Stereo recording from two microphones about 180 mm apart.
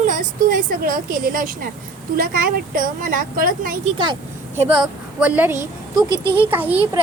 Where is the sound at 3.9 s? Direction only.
25° right (ahead or behind).